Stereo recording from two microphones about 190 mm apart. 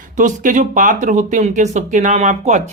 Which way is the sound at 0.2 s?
40° right (ahead or behind).